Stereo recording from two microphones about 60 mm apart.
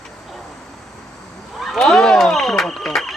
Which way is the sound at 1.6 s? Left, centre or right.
Centre.